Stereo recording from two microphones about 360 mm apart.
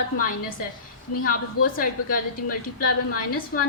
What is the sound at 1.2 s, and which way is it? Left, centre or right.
A woman's voice, left.